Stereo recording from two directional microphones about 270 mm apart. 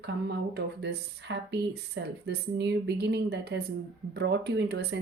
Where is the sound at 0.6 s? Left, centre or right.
Right.